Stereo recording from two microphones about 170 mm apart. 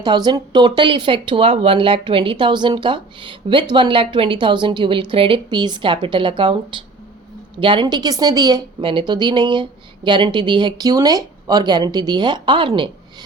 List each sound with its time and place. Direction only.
0.0 s speech: 25° right (ahead or behind)